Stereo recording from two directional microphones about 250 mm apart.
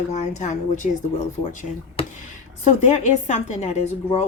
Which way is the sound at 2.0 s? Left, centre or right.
Left.